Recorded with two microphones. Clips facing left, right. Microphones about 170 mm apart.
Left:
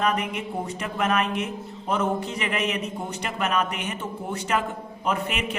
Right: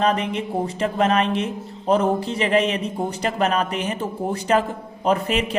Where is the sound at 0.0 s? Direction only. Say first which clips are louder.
Right 4 dB; 30° right (ahead or behind).